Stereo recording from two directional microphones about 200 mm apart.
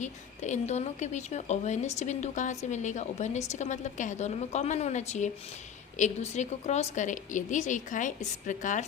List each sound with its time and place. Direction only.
0.0 s a woman's voice: 35° left (ahead or behind)